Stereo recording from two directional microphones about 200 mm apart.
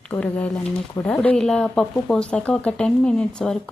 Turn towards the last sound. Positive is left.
turn(degrees=5)  # may be behind; listen again after turning